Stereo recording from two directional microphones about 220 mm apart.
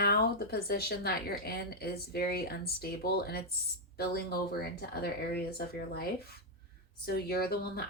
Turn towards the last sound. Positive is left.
turn(degrees=45)  # may be behind; listen again after turning